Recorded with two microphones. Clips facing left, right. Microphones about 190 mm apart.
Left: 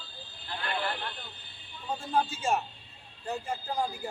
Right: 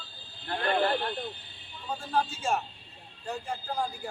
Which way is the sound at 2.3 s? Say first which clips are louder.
Left 1 dB; 5° left (ahead or behind).